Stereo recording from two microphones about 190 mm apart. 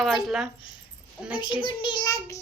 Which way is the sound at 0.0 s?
Centre (ahead or behind).